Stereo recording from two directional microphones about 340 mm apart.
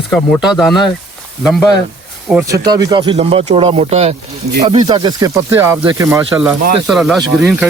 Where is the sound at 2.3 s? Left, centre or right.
Centre.